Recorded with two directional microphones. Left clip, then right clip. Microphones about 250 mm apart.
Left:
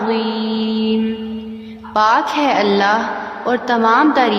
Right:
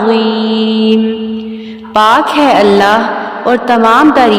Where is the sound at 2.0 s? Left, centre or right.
Right.